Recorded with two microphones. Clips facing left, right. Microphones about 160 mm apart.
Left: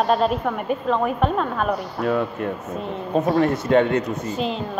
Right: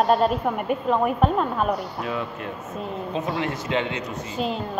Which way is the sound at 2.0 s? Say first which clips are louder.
Left 7 dB; 50° left (ahead or behind).